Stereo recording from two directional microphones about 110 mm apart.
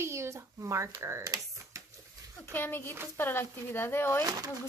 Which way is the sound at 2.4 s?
20° left (ahead or behind).